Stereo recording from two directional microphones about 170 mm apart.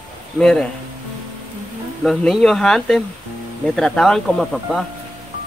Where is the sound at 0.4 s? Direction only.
5° left (ahead or behind).